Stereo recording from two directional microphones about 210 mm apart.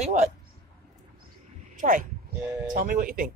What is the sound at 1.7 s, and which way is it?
Speech, 40° right (ahead or behind).